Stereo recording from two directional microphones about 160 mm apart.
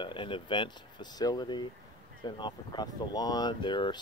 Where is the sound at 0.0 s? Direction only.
30° left (ahead or behind).